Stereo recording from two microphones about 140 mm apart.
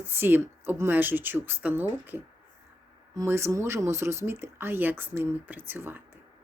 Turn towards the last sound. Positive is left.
turn(degrees=-15)  # may be behind; listen again after turning